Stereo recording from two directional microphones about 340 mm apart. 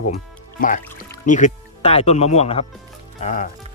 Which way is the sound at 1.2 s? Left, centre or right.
Left.